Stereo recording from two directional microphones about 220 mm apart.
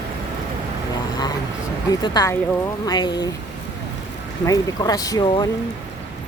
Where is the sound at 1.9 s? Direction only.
15° left (ahead or behind).